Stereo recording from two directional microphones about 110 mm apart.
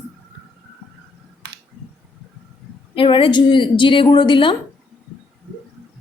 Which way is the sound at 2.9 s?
50° left (ahead or behind).